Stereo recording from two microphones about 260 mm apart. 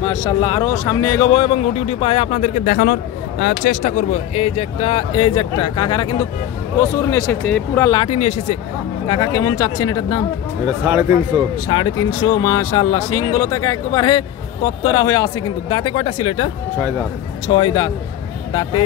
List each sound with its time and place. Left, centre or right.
0.0 s speech: centre
10.9 s speech: centre
11.6 s speech: centre
17.5 s speech: centre